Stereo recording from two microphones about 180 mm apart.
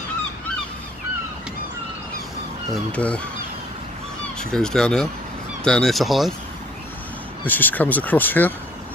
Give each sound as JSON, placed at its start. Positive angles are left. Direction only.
{"t": 2.7, "sound": "speech", "side_deg": 5}
{"t": 4.4, "sound": "speech", "side_deg": 5}
{"t": 7.4, "sound": "speech", "side_deg": 10}